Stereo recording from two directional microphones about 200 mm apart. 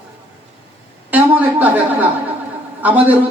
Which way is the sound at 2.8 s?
10° right (ahead or behind).